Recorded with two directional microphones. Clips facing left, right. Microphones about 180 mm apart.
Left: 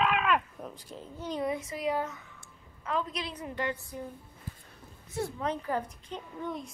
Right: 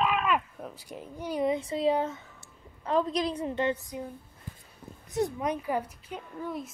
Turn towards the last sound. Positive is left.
turn(degrees=-5)  # may be behind; listen again after turning